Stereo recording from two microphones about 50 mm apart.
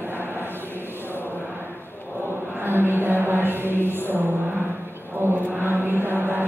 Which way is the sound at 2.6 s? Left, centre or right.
Right.